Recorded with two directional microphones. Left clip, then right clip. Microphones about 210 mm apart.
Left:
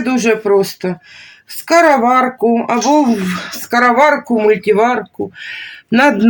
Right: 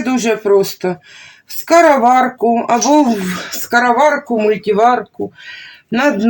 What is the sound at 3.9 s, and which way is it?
Speech, 25° left (ahead or behind).